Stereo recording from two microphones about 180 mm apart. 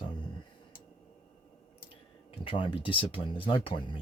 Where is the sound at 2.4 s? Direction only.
30° left (ahead or behind).